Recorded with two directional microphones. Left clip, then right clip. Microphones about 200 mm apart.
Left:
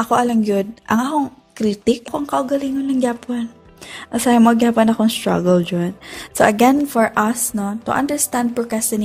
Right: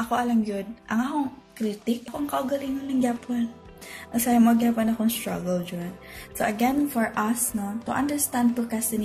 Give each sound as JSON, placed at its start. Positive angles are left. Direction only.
{"t": 0.0, "sound": "a woman's voice", "side_deg": 45}